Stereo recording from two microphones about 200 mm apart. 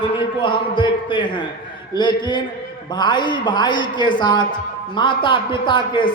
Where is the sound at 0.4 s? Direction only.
25° left (ahead or behind).